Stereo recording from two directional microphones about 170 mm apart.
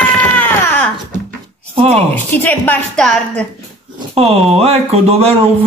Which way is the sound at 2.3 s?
10° left (ahead or behind).